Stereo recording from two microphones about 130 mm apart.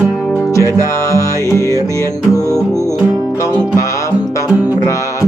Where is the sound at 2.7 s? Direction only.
20° right (ahead or behind).